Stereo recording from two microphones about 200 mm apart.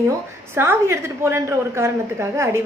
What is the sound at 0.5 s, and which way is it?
A woman's voice, 10° right (ahead or behind).